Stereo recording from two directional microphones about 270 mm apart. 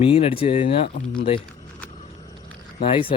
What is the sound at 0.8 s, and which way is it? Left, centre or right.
Speech, left.